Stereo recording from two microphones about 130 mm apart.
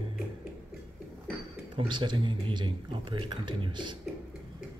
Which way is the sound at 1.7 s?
35° right (ahead or behind).